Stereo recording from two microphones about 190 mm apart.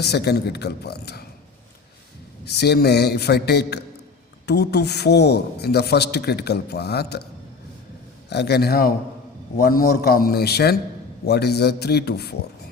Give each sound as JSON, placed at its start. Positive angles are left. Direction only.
{"t": 0.0, "sound": "speech", "side_deg": 60}
{"t": 2.4, "sound": "speech", "side_deg": 60}
{"t": 8.3, "sound": "a man's voice", "side_deg": 60}